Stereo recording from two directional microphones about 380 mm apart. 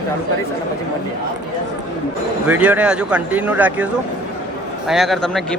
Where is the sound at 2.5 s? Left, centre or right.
Centre.